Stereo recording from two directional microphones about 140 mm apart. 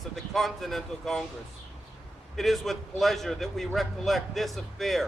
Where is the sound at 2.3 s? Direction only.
Centre (ahead or behind).